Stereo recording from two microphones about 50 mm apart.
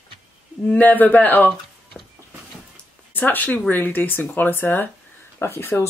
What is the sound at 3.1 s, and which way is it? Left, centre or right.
Speech, left.